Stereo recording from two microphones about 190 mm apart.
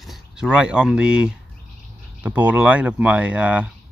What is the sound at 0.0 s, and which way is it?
Speech, centre (ahead or behind).